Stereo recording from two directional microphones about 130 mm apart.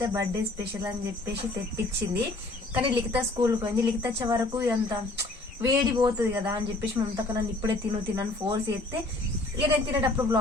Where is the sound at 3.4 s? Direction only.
25° right (ahead or behind).